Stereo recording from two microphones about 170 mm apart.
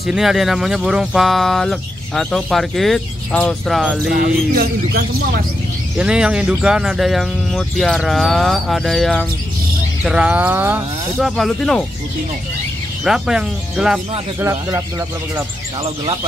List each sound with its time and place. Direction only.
0.0 s speech: centre (ahead or behind)
4.1 s speech: 60° right (ahead or behind)
5.9 s speech: 5° right (ahead or behind)
13.0 s speech: 5° right (ahead or behind)
14.4 s speech: 15° right (ahead or behind)